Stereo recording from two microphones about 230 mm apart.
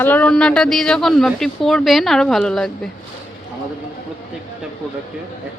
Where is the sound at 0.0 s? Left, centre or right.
Centre.